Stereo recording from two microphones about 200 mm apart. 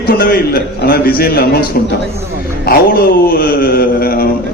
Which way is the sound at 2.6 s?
50° left (ahead or behind).